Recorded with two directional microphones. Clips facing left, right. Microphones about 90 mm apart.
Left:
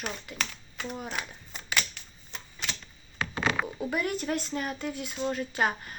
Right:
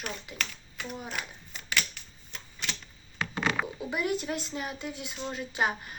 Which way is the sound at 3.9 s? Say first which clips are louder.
Even; 15° right (ahead or behind).